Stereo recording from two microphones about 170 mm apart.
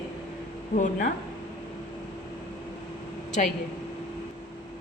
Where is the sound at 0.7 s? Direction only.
50° left (ahead or behind).